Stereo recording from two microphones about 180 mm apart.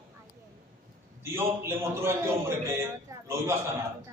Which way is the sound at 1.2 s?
15° right (ahead or behind).